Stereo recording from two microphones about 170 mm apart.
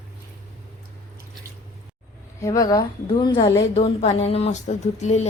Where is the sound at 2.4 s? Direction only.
20° left (ahead or behind).